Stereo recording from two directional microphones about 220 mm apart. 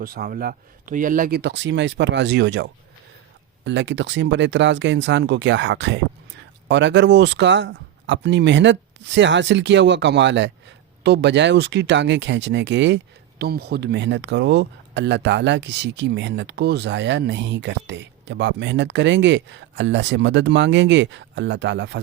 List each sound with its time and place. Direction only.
0.0 s speech: 40° right (ahead or behind)
1.4 s speech: 55° right (ahead or behind)